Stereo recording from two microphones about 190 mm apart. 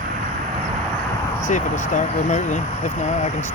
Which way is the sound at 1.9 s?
40° left (ahead or behind).